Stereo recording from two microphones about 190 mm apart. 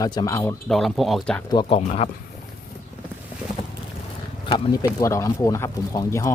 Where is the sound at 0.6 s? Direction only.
Centre (ahead or behind).